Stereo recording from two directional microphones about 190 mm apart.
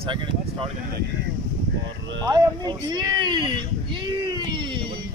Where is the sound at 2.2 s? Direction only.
20° right (ahead or behind).